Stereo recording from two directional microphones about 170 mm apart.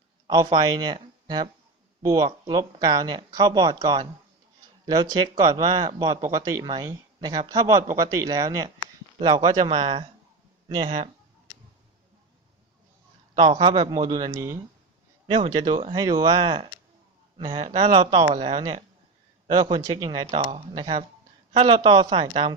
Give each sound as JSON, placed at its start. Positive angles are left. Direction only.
{"t": 0.3, "sound": "speech", "side_deg": -25}
{"t": 13.4, "sound": "speech", "side_deg": -35}
{"t": 15.3, "sound": "speech", "side_deg": -25}